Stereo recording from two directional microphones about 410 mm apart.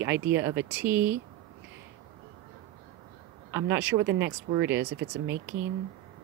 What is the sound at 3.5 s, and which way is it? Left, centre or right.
Speech, centre.